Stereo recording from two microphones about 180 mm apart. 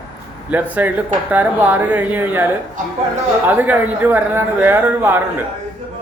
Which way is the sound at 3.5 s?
10° right (ahead or behind).